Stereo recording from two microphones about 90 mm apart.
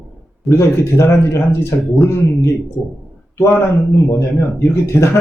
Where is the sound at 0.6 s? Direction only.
30° left (ahead or behind).